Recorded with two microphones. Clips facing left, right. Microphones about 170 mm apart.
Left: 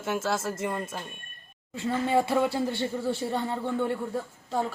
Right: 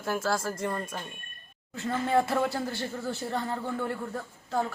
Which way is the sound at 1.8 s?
10° left (ahead or behind).